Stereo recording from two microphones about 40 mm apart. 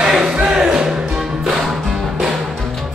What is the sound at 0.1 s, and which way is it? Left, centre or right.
Music, centre.